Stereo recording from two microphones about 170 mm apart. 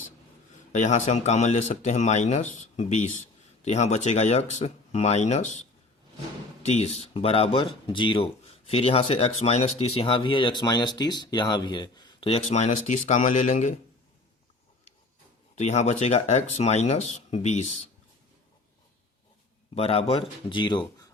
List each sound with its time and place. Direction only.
0.7 s speech: 45° left (ahead or behind)
6.6 s speech: 40° left (ahead or behind)
15.5 s speech: 40° left (ahead or behind)
19.7 s speech: 35° left (ahead or behind)